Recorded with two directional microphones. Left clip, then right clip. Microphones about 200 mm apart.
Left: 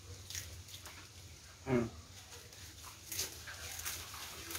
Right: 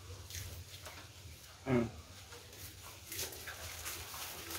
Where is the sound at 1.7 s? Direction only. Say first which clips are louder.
Right 1 dB; 55° right (ahead or behind).